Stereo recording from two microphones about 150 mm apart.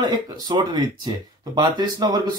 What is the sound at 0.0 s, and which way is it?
Speech, 30° right (ahead or behind).